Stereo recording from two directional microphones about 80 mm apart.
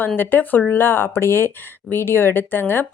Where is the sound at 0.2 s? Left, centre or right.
Left.